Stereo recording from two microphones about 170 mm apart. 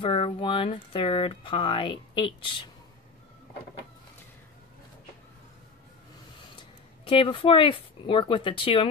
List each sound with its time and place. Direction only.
0.0 s speech: 30° left (ahead or behind)
7.1 s speech: 30° left (ahead or behind)